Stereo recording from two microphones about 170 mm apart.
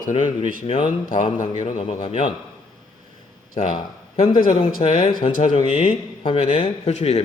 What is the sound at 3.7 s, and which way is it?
A man's voice, 25° left (ahead or behind).